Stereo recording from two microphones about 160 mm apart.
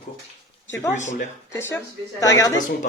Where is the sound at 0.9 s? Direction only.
50° left (ahead or behind).